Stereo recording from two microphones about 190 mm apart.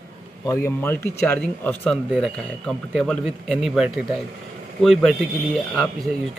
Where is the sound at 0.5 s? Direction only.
15° left (ahead or behind).